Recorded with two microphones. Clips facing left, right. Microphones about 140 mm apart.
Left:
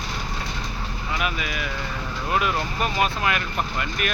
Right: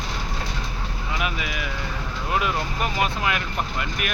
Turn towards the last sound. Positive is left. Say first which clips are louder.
# left 1 dB
turn(degrees=-15)  # may be behind; listen again after turning